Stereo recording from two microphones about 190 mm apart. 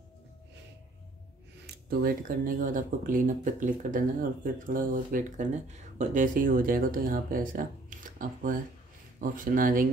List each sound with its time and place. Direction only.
1.7 s speech: 50° right (ahead or behind)